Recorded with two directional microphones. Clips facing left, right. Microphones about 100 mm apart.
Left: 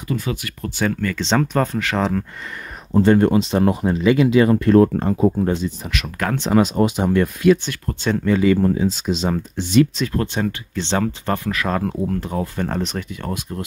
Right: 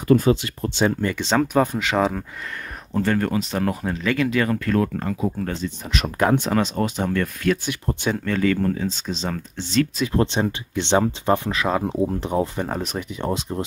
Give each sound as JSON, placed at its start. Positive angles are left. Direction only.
{"t": 0.3, "sound": "speech", "side_deg": -25}
{"t": 1.2, "sound": "speech", "side_deg": -5}
{"t": 2.9, "sound": "speech", "side_deg": 20}
{"t": 5.9, "sound": "speech", "side_deg": -35}
{"t": 6.1, "sound": "speech", "side_deg": -20}
{"t": 6.5, "sound": "speech", "side_deg": 10}
{"t": 7.8, "sound": "speech", "side_deg": -20}
{"t": 8.3, "sound": "speech", "side_deg": 10}
{"t": 10.0, "sound": "speech", "side_deg": -20}
{"t": 12.6, "sound": "speech", "side_deg": -5}
{"t": 13.1, "sound": "speech", "side_deg": -25}